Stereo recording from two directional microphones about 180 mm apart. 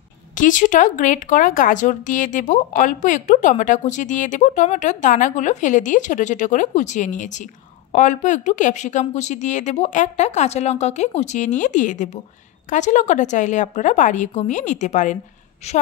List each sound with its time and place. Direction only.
0.4 s a woman's voice: 45° left (ahead or behind)